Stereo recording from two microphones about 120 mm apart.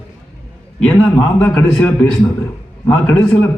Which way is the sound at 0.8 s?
10° left (ahead or behind).